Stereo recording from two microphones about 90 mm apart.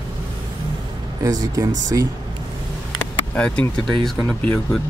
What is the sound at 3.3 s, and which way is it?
Speech, 15° left (ahead or behind).